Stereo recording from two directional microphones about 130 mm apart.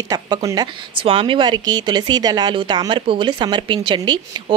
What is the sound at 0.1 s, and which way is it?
Speech, 25° right (ahead or behind).